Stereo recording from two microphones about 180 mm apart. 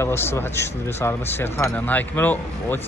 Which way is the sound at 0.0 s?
15° left (ahead or behind).